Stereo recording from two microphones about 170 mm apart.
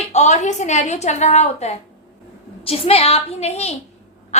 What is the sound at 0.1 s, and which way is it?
A woman's voice, 40° left (ahead or behind).